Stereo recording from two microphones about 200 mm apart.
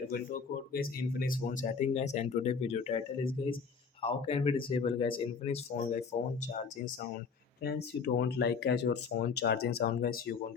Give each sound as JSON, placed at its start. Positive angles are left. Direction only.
{"t": 0.1, "sound": "speech", "side_deg": 45}
{"t": 7.6, "sound": "speech", "side_deg": 55}